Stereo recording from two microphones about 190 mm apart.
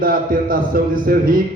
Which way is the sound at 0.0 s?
50° right (ahead or behind).